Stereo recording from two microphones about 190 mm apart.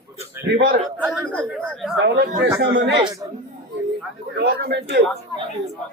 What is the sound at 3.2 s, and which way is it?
Speech, 20° right (ahead or behind).